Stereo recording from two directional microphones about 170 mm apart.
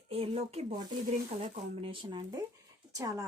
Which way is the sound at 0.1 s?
35° right (ahead or behind).